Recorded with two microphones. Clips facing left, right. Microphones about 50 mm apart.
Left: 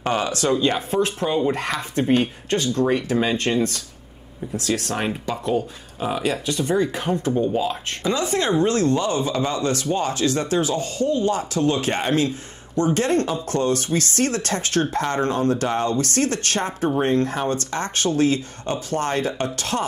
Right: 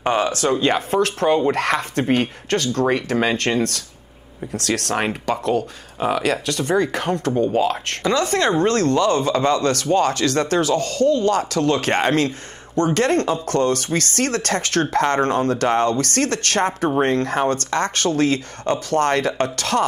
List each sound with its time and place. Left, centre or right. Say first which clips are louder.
0.2 s speech: right 2 dB; right
1.0 s speech: right 4 dB; right